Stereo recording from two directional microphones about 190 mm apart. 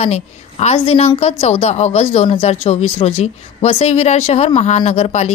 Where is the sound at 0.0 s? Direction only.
35° left (ahead or behind).